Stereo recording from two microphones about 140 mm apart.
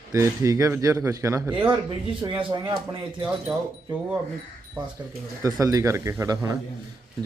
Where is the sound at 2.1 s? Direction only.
35° right (ahead or behind).